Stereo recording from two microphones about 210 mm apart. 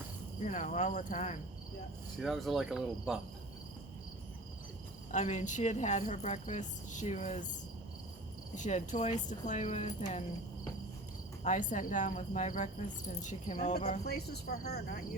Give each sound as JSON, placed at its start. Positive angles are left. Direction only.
{"t": 0.4, "sound": "speech", "side_deg": 35}
{"t": 2.1, "sound": "speech", "side_deg": 0}
{"t": 5.1, "sound": "speech", "side_deg": 35}
{"t": 8.5, "sound": "speech", "side_deg": 35}
{"t": 11.4, "sound": "speech", "side_deg": 35}
{"t": 14.0, "sound": "speech", "side_deg": 50}